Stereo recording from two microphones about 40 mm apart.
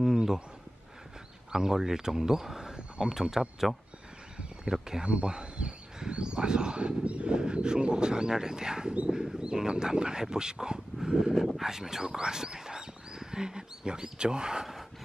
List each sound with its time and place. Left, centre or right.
0.0 s a sound: centre
1.5 s speech: centre
4.8 s speech: centre
11.1 s speech: centre